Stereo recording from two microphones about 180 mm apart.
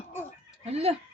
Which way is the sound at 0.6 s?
35° right (ahead or behind).